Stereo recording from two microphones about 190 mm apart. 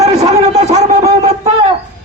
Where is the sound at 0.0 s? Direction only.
35° right (ahead or behind).